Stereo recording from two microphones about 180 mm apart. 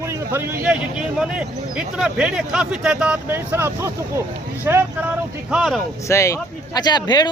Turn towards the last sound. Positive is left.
turn(degrees=25)  # may be behind; listen again after turning